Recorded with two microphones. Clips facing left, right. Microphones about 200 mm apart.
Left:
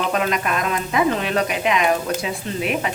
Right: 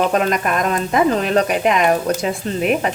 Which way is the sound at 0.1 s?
45° right (ahead or behind).